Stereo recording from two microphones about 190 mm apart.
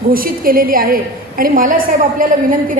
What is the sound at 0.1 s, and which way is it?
A woman's voice, 50° right (ahead or behind).